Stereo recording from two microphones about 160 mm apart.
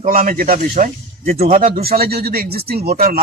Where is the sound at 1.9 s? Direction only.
75° right (ahead or behind).